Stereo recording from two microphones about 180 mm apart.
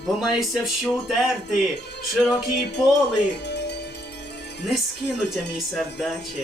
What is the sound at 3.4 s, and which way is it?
Music, 70° left (ahead or behind).